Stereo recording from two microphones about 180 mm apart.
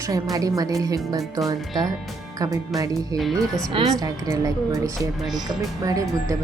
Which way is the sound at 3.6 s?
25° right (ahead or behind).